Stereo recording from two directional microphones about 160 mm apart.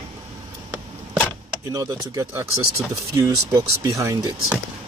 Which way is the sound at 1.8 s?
20° right (ahead or behind).